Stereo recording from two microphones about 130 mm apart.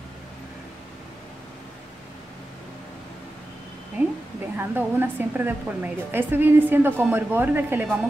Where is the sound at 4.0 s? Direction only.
15° right (ahead or behind).